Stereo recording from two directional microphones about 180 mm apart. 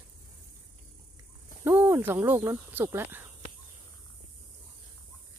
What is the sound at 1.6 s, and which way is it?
Speech, 15° right (ahead or behind).